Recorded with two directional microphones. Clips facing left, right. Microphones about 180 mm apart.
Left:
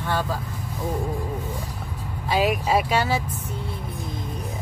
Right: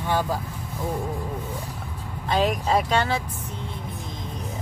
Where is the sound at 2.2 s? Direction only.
5° left (ahead or behind).